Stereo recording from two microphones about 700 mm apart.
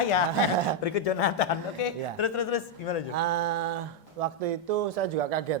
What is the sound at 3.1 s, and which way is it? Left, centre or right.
A man's voice, right.